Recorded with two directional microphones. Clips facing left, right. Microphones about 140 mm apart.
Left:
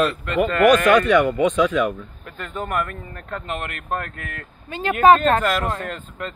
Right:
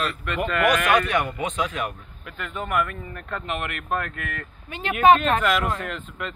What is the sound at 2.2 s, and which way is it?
Speech, 35° left (ahead or behind).